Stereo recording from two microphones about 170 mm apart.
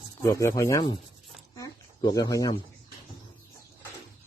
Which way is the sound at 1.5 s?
20° left (ahead or behind).